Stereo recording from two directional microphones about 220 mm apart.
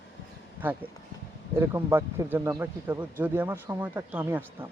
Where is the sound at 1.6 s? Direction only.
10° right (ahead or behind).